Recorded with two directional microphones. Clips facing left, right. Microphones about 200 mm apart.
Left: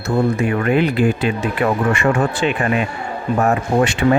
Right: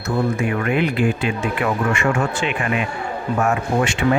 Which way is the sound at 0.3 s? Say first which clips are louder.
Left 3 dB; 35° left (ahead or behind).